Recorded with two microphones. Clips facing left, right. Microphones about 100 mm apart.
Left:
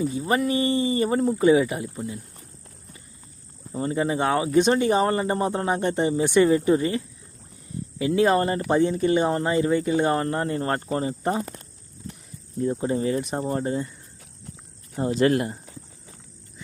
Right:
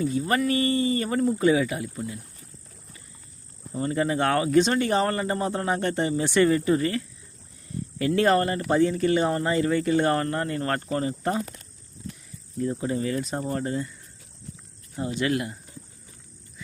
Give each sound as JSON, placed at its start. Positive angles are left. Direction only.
{"t": 0.3, "sound": "speech", "side_deg": 20}
{"t": 3.7, "sound": "speech", "side_deg": 25}
{"t": 8.4, "sound": "speech", "side_deg": 25}
{"t": 12.5, "sound": "speech", "side_deg": 30}
{"t": 14.9, "sound": "speech", "side_deg": 40}